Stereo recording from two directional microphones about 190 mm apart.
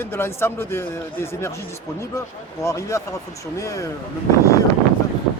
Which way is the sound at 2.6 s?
15° left (ahead or behind).